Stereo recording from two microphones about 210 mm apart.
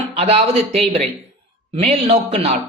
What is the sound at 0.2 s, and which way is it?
A man's voice, 30° right (ahead or behind).